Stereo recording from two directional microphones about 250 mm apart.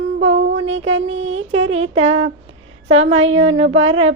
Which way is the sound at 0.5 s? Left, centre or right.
Right.